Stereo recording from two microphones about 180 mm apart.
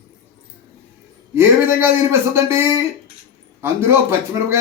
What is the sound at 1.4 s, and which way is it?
Speech, 15° right (ahead or behind).